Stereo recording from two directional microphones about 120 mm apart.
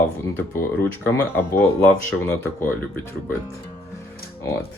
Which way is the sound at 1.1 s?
20° left (ahead or behind).